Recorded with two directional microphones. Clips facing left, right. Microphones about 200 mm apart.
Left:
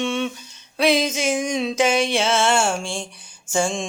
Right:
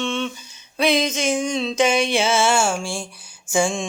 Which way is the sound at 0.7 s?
Centre (ahead or behind).